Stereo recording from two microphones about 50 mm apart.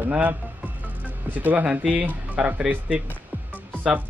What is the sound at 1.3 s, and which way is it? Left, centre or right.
A man's voice, right.